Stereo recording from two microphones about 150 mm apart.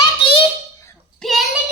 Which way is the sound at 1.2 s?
Centre (ahead or behind).